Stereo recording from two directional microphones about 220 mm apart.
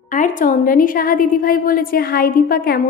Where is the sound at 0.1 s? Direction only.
35° left (ahead or behind).